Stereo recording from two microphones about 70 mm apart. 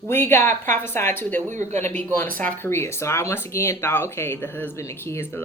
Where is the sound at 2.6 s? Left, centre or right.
Left.